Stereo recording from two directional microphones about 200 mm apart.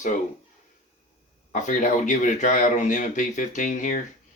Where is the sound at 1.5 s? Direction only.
40° left (ahead or behind).